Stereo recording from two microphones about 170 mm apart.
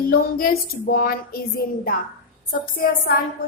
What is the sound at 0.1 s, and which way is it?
A woman's voice, 60° left (ahead or behind).